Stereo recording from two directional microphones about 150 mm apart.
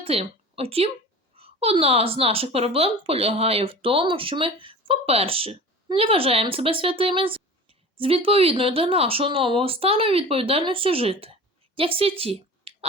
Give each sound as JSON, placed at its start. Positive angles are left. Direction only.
{"t": 0.0, "sound": "speech", "side_deg": -40}